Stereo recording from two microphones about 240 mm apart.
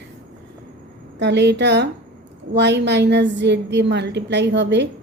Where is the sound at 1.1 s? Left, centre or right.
Right.